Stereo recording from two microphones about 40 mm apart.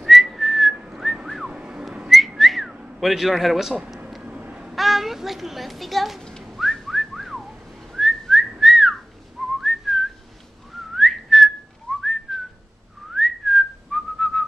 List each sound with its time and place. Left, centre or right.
0.0 s whistling: centre
1.4 s car alarm: right
2.0 s whistling: centre
3.0 s a man's voice: centre
4.2 s a sound: right
4.7 s a child's voice: centre
6.4 s whistling: centre